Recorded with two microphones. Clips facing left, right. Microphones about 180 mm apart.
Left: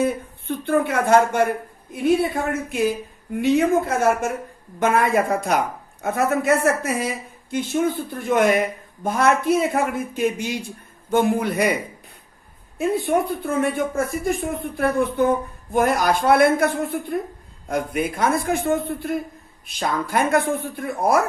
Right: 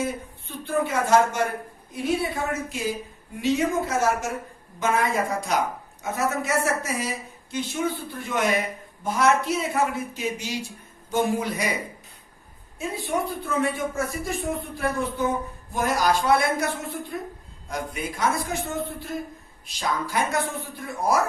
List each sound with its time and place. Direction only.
0.0 s speech: 60° left (ahead or behind)
12.8 s speech: 60° left (ahead or behind)
17.7 s speech: 60° left (ahead or behind)